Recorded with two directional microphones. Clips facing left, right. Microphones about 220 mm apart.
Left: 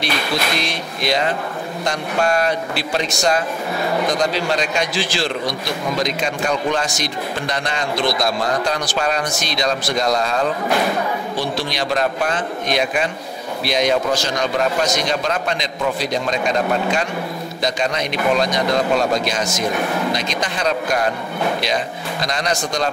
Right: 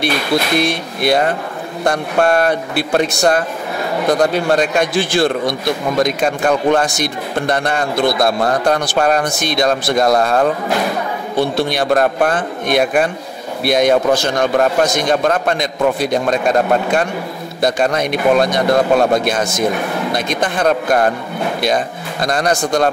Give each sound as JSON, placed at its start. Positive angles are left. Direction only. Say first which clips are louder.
{"t": 0.6, "sound": "a man's voice", "louder": "right 7 dB", "side_deg": -55}